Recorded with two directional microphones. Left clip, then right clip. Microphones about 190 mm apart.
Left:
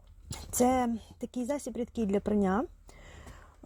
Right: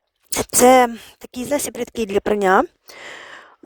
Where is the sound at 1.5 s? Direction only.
55° right (ahead or behind).